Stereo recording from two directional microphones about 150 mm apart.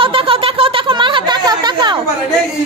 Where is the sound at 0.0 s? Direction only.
35° right (ahead or behind).